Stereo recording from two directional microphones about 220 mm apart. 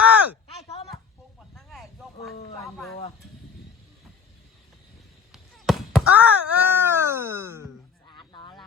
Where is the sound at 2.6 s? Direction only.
Centre (ahead or behind).